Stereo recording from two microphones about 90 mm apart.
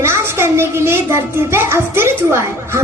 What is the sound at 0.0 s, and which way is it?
A child's voice, 30° right (ahead or behind).